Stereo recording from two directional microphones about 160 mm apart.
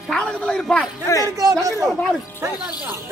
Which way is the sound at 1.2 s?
20° right (ahead or behind).